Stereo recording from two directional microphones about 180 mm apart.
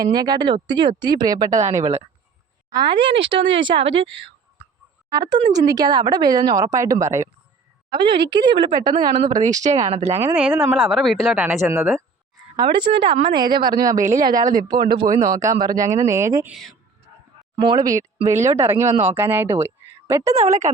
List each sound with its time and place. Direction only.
0.0 s speech: 20° right (ahead or behind)
5.3 s a woman's voice: 20° right (ahead or behind)
10.1 s speech: 10° right (ahead or behind)
12.5 s speech: 25° right (ahead or behind)
14.0 s speech: 45° right (ahead or behind)
14.7 s speech: 25° right (ahead or behind)
16.5 s speech: centre (ahead or behind)
17.6 s a woman's voice: 25° right (ahead or behind)
20.3 s a woman's voice: 40° right (ahead or behind)